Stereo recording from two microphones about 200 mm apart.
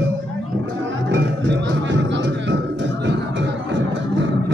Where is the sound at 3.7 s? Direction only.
65° right (ahead or behind).